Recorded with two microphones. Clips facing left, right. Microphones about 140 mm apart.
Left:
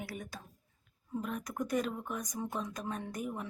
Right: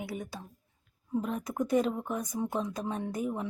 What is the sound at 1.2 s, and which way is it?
A woman's voice, 25° right (ahead or behind).